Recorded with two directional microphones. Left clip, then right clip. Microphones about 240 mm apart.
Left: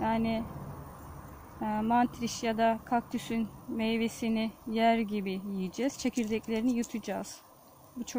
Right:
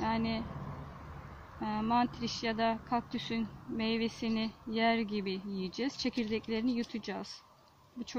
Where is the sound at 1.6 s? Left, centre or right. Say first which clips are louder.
Left 3 dB; left.